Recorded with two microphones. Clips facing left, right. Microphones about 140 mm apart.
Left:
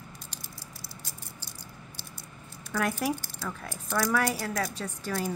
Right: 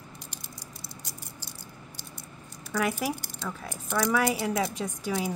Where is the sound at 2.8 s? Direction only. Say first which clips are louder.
Even; 5° right (ahead or behind).